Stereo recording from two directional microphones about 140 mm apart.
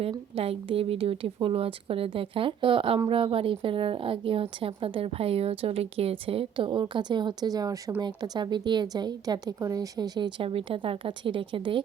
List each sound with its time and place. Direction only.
0.0 s a woman's voice: 45° right (ahead or behind)